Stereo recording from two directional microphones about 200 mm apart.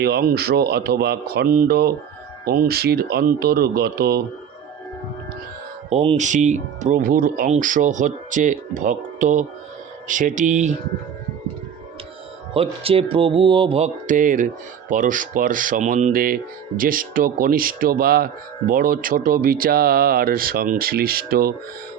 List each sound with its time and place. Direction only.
0.0 s speech: 50° right (ahead or behind)
5.9 s speech: 30° right (ahead or behind)
12.5 s speech: 30° right (ahead or behind); by 21.5 s 50° right (ahead or behind)